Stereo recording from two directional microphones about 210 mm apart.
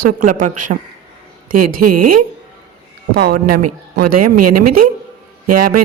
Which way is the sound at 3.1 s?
50° right (ahead or behind).